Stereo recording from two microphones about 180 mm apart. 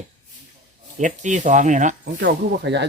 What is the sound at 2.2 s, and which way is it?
Speech, 70° right (ahead or behind).